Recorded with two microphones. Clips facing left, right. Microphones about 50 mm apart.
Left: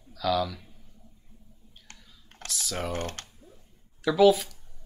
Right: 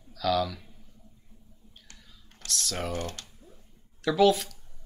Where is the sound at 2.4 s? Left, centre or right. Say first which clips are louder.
Even; centre.